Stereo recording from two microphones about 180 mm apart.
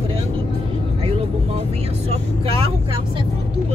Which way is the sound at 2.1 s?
30° right (ahead or behind).